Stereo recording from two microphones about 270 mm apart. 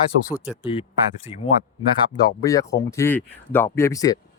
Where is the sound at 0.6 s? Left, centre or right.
Centre.